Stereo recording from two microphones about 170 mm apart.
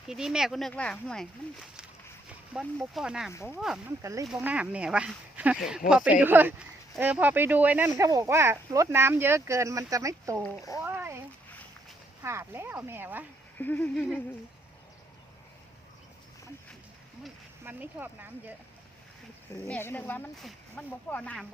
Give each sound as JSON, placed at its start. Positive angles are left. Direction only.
{"t": 0.1, "sound": "speech", "side_deg": -5}
{"t": 2.5, "sound": "speech", "side_deg": -5}
{"t": 3.3, "sound": "speech", "side_deg": 15}
{"t": 4.0, "sound": "speech", "side_deg": -20}
{"t": 10.8, "sound": "a sound", "side_deg": -10}
{"t": 12.2, "sound": "speech", "side_deg": -15}
{"t": 13.6, "sound": "speech", "side_deg": 10}
{"t": 17.2, "sound": "speech", "side_deg": -10}
{"t": 19.6, "sound": "speech", "side_deg": 10}